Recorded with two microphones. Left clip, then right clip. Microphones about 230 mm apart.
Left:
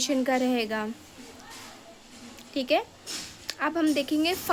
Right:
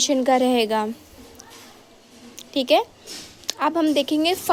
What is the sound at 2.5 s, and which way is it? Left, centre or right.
Speech, right.